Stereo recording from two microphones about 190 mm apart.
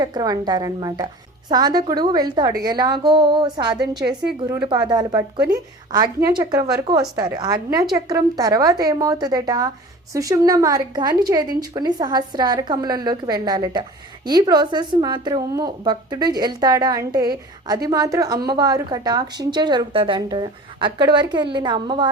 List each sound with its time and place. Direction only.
0.0 s a woman's voice: 20° right (ahead or behind)